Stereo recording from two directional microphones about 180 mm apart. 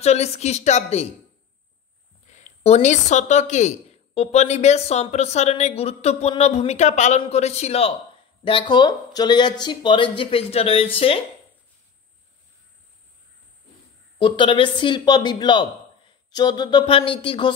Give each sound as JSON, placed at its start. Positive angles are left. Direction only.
{"t": 0.0, "sound": "a woman's voice", "side_deg": 35}
{"t": 2.2, "sound": "a woman's voice", "side_deg": 40}
{"t": 14.1, "sound": "speech", "side_deg": 25}